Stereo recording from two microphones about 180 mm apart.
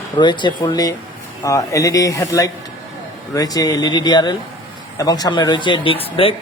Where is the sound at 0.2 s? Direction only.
25° left (ahead or behind).